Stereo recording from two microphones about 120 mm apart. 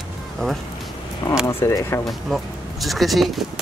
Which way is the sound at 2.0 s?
Centre (ahead or behind).